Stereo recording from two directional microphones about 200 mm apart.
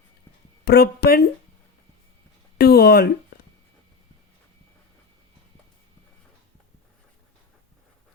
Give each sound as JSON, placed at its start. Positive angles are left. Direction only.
{"t": 0.6, "sound": "speech", "side_deg": 55}
{"t": 2.6, "sound": "speech", "side_deg": 50}